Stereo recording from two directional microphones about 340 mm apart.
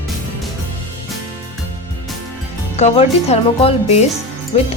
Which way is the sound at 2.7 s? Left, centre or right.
Centre.